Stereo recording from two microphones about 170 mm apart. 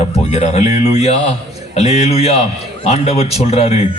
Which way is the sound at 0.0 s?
35° left (ahead or behind).